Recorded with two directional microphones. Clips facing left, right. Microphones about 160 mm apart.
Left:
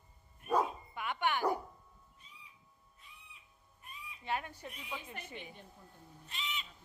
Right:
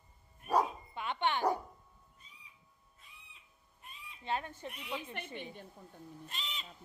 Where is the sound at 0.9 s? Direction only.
25° right (ahead or behind).